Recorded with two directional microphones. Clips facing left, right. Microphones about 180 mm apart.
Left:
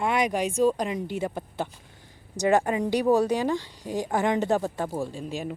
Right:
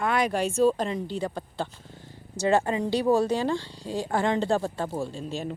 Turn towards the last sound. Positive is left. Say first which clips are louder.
# even
turn(degrees=15)  # may be behind; listen again after turning